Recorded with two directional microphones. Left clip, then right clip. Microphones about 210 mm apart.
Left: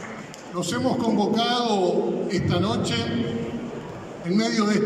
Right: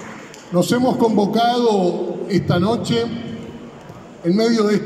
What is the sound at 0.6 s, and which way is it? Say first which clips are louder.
A man's voice: right 9 dB; 40° right (ahead or behind).